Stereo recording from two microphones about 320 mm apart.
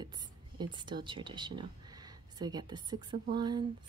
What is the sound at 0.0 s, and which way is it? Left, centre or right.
A woman's voice, centre.